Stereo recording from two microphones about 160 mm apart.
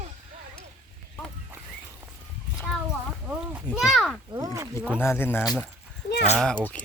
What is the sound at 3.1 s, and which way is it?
Speech, 5° right (ahead or behind).